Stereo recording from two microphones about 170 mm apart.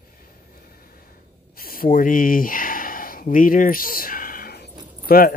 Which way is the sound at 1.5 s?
60° left (ahead or behind).